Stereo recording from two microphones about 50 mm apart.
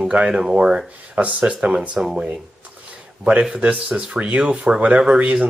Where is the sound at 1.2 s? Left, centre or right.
Right.